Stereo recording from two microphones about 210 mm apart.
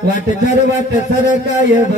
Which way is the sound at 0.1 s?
35° left (ahead or behind).